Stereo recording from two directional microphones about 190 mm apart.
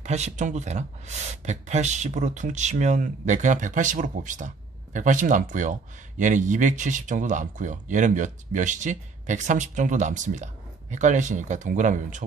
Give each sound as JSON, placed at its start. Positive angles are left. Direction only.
{"t": 0.0, "sound": "speech", "side_deg": -35}